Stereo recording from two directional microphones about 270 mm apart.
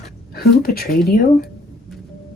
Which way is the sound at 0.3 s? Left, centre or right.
Left.